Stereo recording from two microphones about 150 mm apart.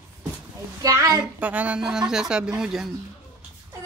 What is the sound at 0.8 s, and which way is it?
Speech, 25° right (ahead or behind).